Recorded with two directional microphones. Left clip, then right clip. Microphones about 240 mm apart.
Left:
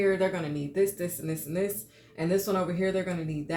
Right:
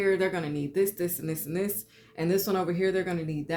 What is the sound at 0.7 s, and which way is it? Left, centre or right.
Speech, right.